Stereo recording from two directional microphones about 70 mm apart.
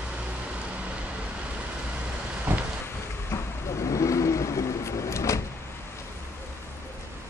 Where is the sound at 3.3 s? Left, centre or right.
Left.